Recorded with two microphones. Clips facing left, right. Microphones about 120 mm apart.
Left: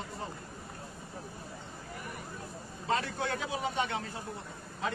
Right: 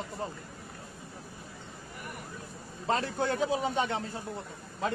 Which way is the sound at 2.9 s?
35° right (ahead or behind).